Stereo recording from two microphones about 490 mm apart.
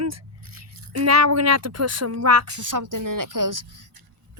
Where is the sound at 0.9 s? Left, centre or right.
Right.